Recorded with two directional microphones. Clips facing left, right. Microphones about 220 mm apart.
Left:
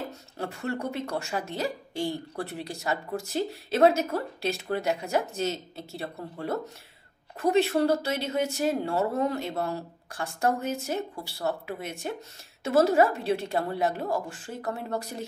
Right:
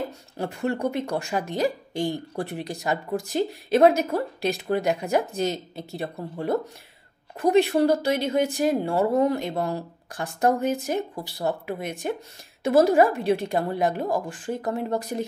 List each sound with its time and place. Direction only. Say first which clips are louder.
0.4 s speech: right 6 dB; 15° right (ahead or behind)